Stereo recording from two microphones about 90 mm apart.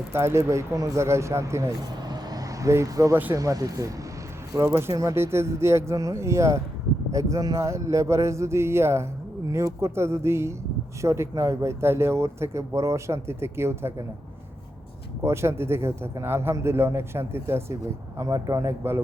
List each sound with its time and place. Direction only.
0.1 s speech: 30° right (ahead or behind)
2.0 s vehicle: 45° right (ahead or behind)
3.3 s speech: 40° right (ahead or behind)
4.5 s speech: 30° right (ahead or behind)
15.2 s a man's voice: 30° right (ahead or behind)
18.2 s speech: 40° right (ahead or behind)